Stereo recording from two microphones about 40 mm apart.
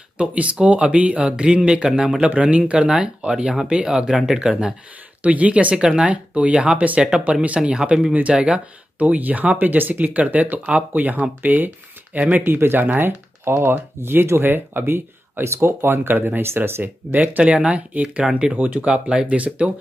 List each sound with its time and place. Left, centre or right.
0.2 s speech: right
5.2 s speech: right
5.8 s speech: right
7.4 s speech: right
12.5 s speech: right
12.8 s speech: right
17.0 s speech: right